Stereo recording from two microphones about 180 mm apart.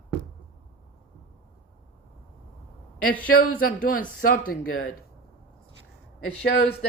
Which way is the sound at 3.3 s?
50° left (ahead or behind).